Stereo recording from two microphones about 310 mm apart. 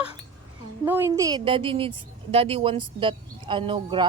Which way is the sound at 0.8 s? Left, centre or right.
Centre.